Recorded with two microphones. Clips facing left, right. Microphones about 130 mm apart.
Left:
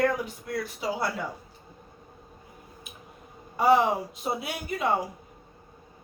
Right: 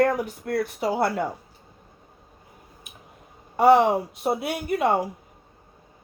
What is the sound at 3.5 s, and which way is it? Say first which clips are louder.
Speech: right 5 dB; 65° right (ahead or behind).